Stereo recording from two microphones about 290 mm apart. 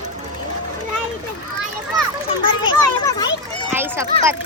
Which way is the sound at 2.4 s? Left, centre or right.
Centre.